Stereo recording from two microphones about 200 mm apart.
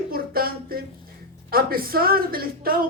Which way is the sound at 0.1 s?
45° right (ahead or behind).